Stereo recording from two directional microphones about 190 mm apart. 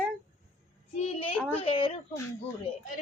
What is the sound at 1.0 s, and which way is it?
Speech, 30° left (ahead or behind).